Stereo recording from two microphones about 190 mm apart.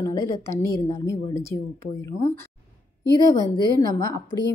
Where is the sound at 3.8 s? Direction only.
15° left (ahead or behind).